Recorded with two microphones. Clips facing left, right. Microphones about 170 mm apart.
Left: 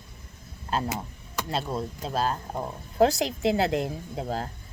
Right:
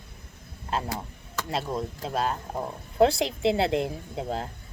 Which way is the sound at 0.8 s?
20° left (ahead or behind).